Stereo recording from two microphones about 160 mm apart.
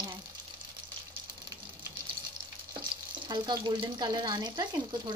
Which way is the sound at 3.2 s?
25° right (ahead or behind).